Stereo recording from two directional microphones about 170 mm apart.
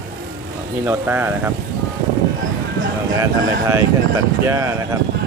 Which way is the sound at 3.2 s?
15° right (ahead or behind).